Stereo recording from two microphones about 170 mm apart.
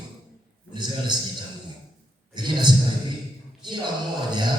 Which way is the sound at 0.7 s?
25° right (ahead or behind).